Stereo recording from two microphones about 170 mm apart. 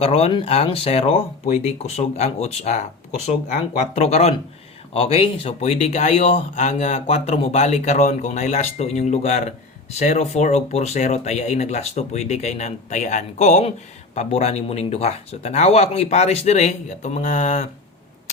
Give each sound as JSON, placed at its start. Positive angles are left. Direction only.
{"t": 0.0, "sound": "speech", "side_deg": 35}